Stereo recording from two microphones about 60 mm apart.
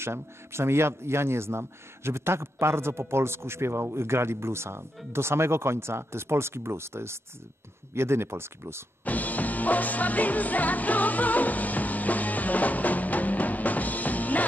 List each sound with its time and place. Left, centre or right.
0.0 s speech: right
9.0 s music: left